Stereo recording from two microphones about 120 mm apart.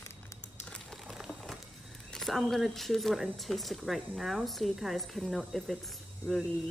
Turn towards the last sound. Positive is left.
turn(degrees=5)  # may be behind; listen again after turning